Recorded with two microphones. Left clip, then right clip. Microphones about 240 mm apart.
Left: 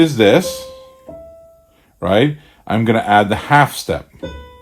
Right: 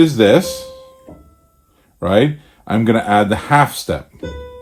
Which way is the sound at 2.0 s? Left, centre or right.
Left.